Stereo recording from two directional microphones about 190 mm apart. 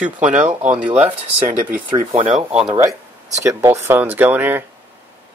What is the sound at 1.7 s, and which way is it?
Speech, 40° right (ahead or behind).